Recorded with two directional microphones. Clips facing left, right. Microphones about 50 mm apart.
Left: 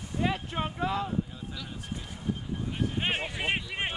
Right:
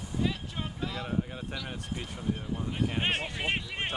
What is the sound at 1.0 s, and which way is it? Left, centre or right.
Speech, right.